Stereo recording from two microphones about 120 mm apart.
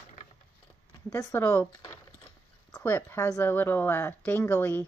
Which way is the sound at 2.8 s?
20° left (ahead or behind).